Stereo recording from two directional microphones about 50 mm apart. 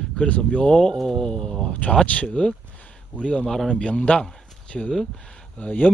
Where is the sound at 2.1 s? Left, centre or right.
Left.